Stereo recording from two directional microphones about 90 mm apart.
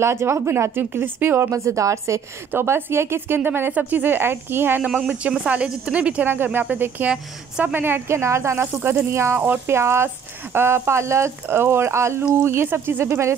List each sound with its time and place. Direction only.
0.0 s a woman's voice: 30° right (ahead or behind)
1.5 s a woman's voice: 35° right (ahead or behind)